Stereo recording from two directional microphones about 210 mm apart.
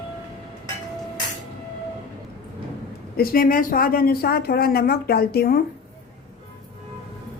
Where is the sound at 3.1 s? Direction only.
45° left (ahead or behind).